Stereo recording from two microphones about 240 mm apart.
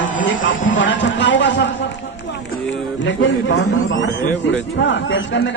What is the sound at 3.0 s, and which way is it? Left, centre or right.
Speech, left.